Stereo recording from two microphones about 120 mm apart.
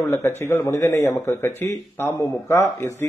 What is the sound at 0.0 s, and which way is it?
A man's voice, 25° left (ahead or behind).